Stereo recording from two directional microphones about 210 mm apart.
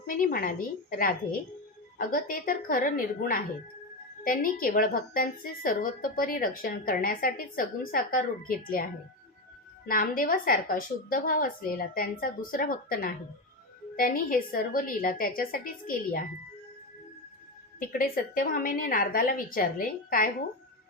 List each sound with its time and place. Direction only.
0.0 s a woman's voice: 40° left (ahead or behind)
17.7 s a woman's voice: 45° left (ahead or behind)